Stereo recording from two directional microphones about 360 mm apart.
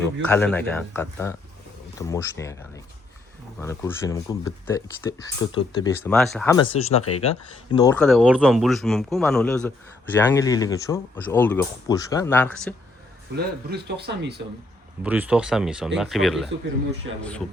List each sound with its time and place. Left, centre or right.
0.0 s speech: centre
13.3 s speech: right
15.0 s speech: centre